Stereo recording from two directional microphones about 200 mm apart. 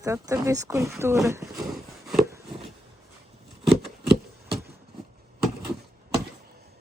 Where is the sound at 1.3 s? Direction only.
15° right (ahead or behind).